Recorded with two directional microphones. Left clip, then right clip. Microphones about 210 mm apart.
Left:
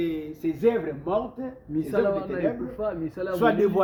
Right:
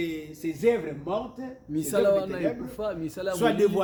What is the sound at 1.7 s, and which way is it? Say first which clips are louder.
Speech: right 2 dB; 55° right (ahead or behind).